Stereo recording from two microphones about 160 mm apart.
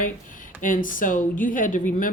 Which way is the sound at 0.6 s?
55° left (ahead or behind).